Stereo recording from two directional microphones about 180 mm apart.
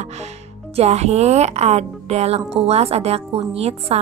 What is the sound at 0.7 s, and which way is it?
A woman's voice, 35° right (ahead or behind).